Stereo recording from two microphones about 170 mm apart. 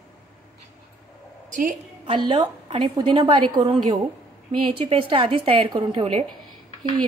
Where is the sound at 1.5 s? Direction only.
50° right (ahead or behind).